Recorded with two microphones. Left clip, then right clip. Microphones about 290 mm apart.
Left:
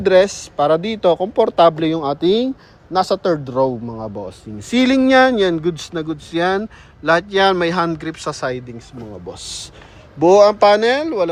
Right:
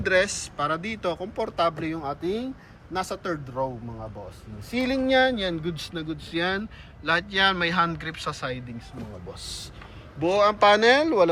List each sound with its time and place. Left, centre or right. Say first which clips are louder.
0.0 s speech: left 10 dB; left
2.0 s speech: left 14 dB; left
2.9 s speech: left 13 dB; left
3.5 s speech: left 12 dB; left
10.2 s speech: left 10 dB; left